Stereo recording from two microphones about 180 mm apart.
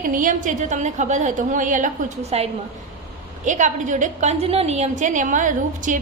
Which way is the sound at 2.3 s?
35° right (ahead or behind).